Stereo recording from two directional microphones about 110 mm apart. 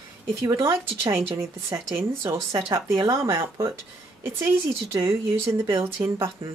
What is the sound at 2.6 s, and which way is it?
Speech, 45° right (ahead or behind).